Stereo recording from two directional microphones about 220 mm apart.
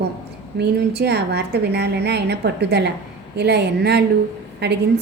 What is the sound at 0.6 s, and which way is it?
A woman's voice, 50° right (ahead or behind).